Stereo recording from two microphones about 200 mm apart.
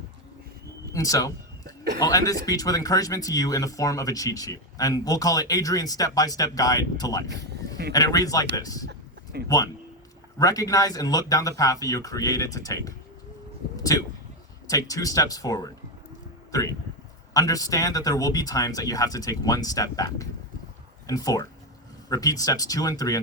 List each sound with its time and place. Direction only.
0.9 s speech: 15° left (ahead or behind)
7.3 s speech: 60° right (ahead or behind)
7.9 s speech: 15° left (ahead or behind)
8.9 s a sound: 55° right (ahead or behind)
10.3 s speech: 15° left (ahead or behind)